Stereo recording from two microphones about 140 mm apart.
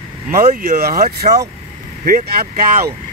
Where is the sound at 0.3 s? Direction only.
90° right.